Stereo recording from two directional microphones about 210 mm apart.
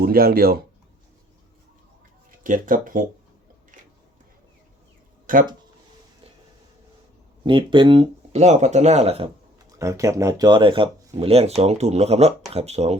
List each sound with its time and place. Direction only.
0.0 s speech: 45° right (ahead or behind)
2.4 s speech: 40° right (ahead or behind)
5.2 s a sound: 40° right (ahead or behind)
7.4 s speech: 25° right (ahead or behind)
9.7 s speech: 15° right (ahead or behind); by 13.0 s 30° right (ahead or behind)